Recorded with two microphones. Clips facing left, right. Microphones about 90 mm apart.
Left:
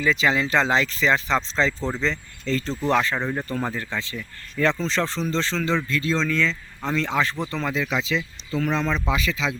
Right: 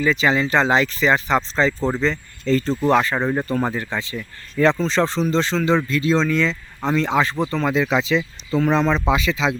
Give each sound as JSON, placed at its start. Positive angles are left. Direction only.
{"t": 0.0, "sound": "speech", "side_deg": 0}
{"t": 7.7, "sound": "speech", "side_deg": -25}